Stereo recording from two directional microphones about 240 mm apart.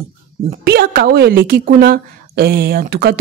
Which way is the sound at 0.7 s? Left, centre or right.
Right.